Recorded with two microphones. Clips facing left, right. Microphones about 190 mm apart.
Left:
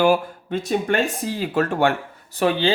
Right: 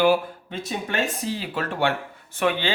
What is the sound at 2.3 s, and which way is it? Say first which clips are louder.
Speech: left 4 dB; 35° left (ahead or behind).